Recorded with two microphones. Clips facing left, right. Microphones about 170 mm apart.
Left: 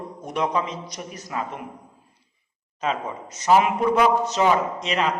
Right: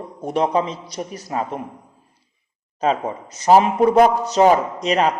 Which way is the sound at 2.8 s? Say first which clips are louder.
Right 6 dB; 35° right (ahead or behind).